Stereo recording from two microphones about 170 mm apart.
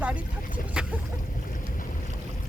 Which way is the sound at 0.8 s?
5° right (ahead or behind).